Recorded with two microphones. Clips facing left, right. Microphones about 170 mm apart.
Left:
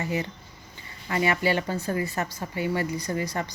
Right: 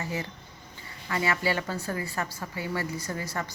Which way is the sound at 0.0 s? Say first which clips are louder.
Left 4 dB; 20° left (ahead or behind).